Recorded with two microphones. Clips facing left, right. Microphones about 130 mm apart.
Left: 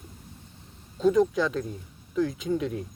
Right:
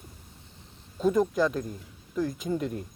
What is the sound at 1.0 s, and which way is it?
Speech, centre (ahead or behind).